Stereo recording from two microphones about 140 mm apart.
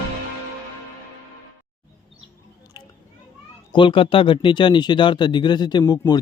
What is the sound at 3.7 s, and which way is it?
Speech, 35° left (ahead or behind).